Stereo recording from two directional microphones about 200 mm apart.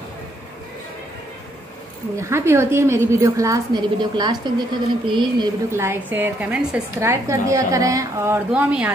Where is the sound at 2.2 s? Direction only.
15° right (ahead or behind).